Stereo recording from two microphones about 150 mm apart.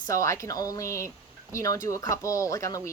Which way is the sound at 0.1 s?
20° left (ahead or behind).